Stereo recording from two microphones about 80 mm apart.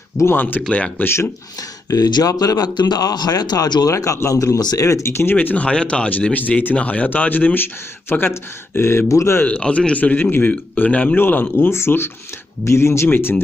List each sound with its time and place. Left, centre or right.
0.1 s speech: left
0.6 s speech: centre
1.0 s speech: left
1.9 s speech: left
3.9 s speech: left
9.5 s speech: centre